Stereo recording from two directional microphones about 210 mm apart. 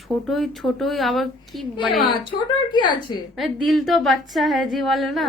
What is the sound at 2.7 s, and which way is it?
Speech, 20° left (ahead or behind).